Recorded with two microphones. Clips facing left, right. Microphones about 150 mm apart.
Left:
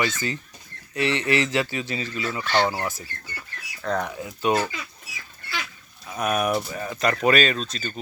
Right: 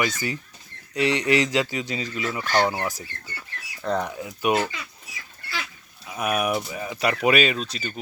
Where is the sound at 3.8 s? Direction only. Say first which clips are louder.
Right 1 dB; 10° right (ahead or behind).